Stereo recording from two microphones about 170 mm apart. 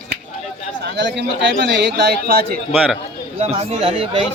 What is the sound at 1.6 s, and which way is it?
Speech, 85° right.